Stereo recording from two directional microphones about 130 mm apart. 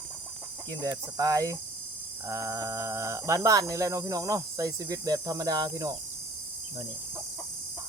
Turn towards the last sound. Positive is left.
turn(degrees=-30)  # may be behind; listen again after turning